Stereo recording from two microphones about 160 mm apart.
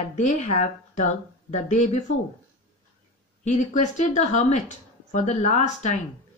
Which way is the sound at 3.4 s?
50° left (ahead or behind).